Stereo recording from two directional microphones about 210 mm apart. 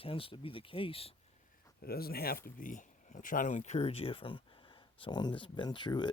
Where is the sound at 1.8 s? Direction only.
45° left (ahead or behind).